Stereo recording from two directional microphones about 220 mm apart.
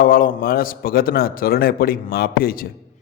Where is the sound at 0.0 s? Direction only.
40° left (ahead or behind).